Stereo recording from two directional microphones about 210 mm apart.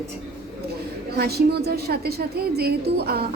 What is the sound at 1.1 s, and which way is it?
A woman's voice, 50° right (ahead or behind).